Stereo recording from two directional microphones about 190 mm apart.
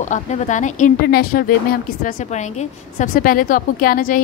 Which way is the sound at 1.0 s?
55° left (ahead or behind).